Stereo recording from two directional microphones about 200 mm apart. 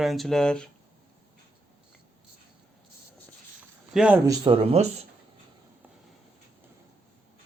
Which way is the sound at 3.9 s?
5° right (ahead or behind).